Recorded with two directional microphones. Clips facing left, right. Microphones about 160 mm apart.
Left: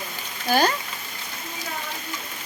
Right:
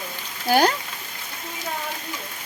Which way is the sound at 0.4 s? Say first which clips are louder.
Right 2 dB; 10° right (ahead or behind).